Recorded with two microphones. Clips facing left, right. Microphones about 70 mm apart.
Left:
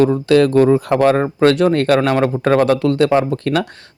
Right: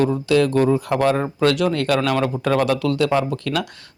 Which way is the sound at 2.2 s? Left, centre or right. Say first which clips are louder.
Left 5 dB; left.